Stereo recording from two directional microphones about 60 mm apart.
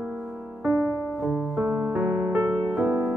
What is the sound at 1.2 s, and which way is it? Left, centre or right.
Music, right.